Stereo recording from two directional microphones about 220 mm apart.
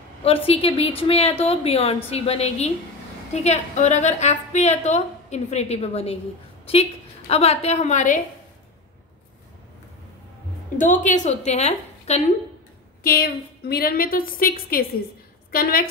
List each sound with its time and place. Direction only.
0.2 s a woman's voice: 25° left (ahead or behind)
10.8 s a woman's voice: 35° left (ahead or behind)
13.0 s a woman's voice: 45° left (ahead or behind)